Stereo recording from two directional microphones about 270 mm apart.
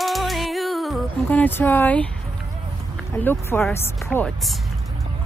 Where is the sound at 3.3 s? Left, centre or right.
Centre.